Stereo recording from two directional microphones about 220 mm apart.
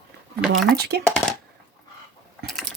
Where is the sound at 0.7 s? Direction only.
45° right (ahead or behind).